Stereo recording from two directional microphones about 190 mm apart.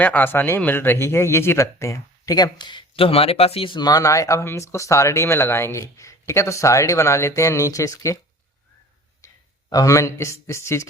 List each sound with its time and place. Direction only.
0.0 s speech: 10° left (ahead or behind)
9.2 s speech: 15° left (ahead or behind)